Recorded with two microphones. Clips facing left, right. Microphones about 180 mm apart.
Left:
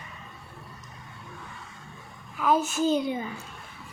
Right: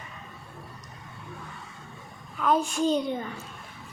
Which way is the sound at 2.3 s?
5° left (ahead or behind).